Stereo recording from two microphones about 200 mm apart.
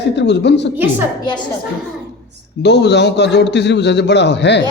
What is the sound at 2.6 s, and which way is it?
A man's voice, 60° left (ahead or behind).